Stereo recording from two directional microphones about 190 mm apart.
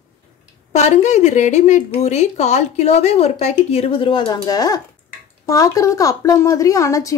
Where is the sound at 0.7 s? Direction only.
40° left (ahead or behind).